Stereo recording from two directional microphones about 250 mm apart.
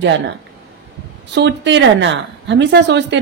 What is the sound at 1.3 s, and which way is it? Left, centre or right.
A woman's voice, right.